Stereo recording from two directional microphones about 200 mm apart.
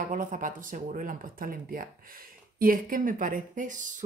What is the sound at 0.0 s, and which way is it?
Speech, 40° right (ahead or behind).